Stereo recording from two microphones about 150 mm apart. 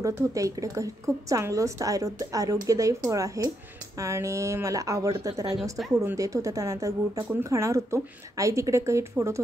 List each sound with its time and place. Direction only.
0.0 s a woman's voice: 20° right (ahead or behind)